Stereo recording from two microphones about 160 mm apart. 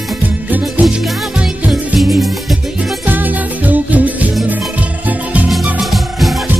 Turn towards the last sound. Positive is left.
turn(degrees=0)  # may be behind; listen again after turning